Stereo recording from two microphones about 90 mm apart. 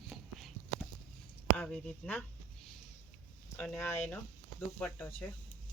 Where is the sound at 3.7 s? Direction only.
25° left (ahead or behind).